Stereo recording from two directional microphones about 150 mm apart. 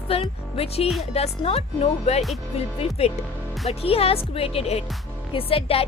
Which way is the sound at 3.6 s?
40° left (ahead or behind).